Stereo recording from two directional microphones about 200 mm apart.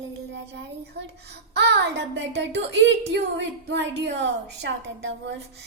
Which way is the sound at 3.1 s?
60° right (ahead or behind).